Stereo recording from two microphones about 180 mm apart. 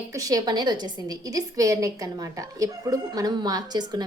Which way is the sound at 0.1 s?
20° right (ahead or behind).